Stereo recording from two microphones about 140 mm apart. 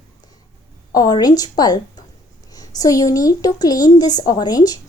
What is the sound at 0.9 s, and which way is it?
A woman's voice, 30° left (ahead or behind).